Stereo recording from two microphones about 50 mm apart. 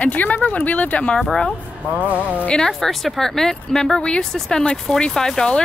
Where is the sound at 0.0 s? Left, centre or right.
Left.